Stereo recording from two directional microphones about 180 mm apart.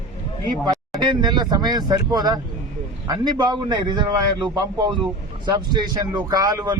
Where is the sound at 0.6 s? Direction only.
25° right (ahead or behind).